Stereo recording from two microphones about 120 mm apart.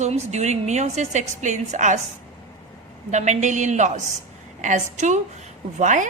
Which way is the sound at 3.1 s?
75° right (ahead or behind).